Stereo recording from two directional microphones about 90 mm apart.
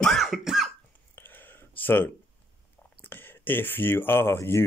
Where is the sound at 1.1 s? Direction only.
20° left (ahead or behind).